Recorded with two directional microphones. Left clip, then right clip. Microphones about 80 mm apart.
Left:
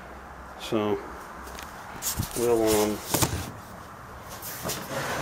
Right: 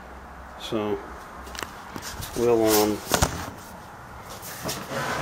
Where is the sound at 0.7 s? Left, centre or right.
Left.